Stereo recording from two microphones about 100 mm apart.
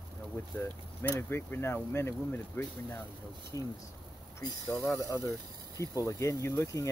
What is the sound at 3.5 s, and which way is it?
Speech, 35° left (ahead or behind).